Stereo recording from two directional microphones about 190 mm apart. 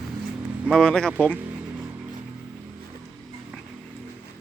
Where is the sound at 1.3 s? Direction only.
10° right (ahead or behind).